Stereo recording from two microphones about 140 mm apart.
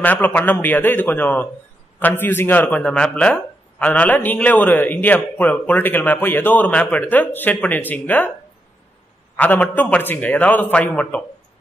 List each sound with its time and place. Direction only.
0.0 s a man's voice: 10° left (ahead or behind)
9.4 s a man's voice: 10° left (ahead or behind)